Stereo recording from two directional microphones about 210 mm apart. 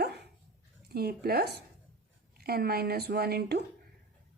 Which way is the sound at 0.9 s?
45° right (ahead or behind).